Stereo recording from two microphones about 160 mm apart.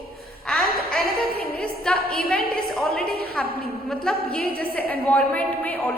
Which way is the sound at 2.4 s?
70° left (ahead or behind).